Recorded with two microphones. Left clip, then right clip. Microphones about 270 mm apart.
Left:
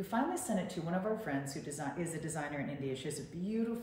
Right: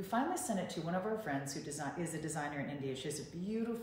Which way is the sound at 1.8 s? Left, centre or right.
Centre.